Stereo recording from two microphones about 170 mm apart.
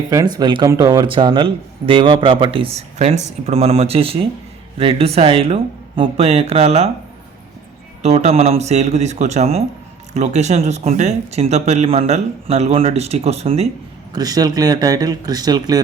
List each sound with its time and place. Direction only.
0.1 s speech: 20° right (ahead or behind); by 6.9 s 35° right (ahead or behind)
8.0 s speech: 40° right (ahead or behind)
14.1 s a man's voice: 20° right (ahead or behind)